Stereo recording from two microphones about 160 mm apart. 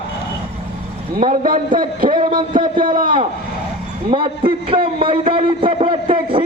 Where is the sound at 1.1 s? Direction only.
60° right (ahead or behind).